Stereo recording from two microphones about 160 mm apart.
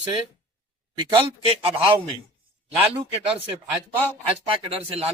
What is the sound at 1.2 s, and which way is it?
Speech, 35° right (ahead or behind).